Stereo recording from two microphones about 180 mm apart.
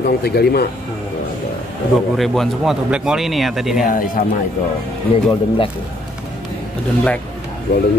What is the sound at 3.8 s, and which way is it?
Speech, 50° left (ahead or behind).